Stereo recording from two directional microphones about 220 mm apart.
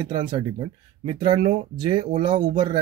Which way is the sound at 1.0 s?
20° right (ahead or behind).